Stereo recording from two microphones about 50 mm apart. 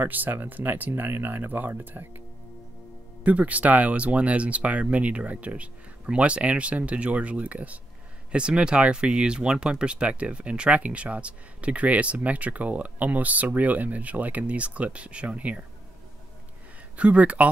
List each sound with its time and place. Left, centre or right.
0.0 s speech: right
3.3 s speech: right
16.9 s speech: right